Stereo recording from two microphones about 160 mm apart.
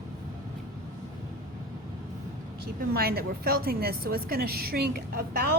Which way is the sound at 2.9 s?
70° right (ahead or behind).